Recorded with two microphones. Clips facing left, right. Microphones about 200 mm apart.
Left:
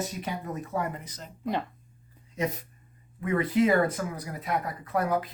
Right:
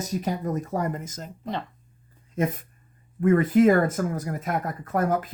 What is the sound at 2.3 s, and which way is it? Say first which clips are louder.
Speech: right 4 dB; 50° right (ahead or behind).